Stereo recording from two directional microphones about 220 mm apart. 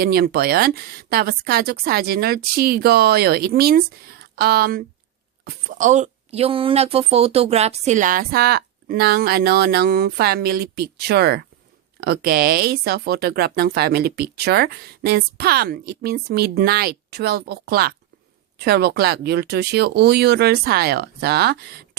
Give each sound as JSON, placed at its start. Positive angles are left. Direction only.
{"t": 0.0, "sound": "speech", "side_deg": -45}